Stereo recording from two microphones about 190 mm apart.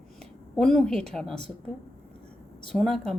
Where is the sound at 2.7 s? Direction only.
5° left (ahead or behind).